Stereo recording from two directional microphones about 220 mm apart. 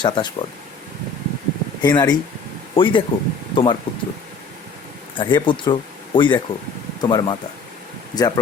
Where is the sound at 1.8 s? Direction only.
20° left (ahead or behind).